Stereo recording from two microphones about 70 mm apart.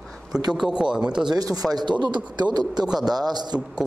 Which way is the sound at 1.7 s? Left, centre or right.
Right.